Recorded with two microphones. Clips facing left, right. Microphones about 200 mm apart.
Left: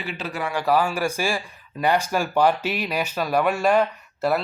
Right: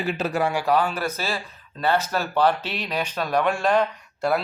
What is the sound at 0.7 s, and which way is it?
Speech, 10° left (ahead or behind).